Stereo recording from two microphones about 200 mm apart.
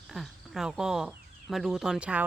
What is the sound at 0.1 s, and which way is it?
Speech, centre (ahead or behind).